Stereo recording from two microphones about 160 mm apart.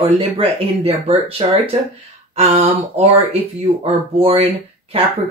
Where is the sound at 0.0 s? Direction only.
35° right (ahead or behind).